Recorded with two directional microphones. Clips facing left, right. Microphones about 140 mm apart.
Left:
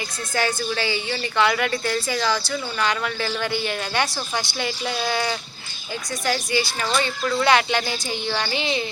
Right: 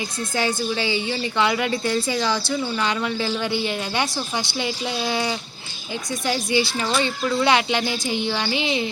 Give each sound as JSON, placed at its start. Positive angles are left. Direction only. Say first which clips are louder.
{"t": 0.3, "sound": "a woman's voice", "louder": "even", "side_deg": -20}